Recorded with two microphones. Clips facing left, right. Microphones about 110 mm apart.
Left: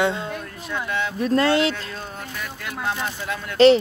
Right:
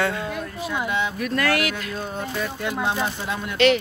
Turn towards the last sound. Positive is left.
turn(degrees=35)  # may be behind; listen again after turning